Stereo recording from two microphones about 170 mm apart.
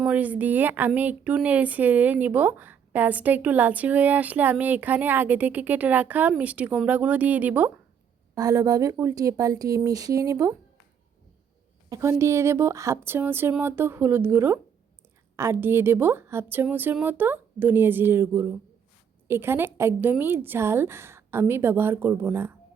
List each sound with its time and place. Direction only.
0.0 s speech: 10° right (ahead or behind)
8.4 s speech: 20° right (ahead or behind)
11.9 s speech: 15° right (ahead or behind)